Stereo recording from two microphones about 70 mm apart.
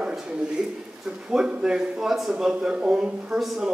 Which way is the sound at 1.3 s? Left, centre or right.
Centre.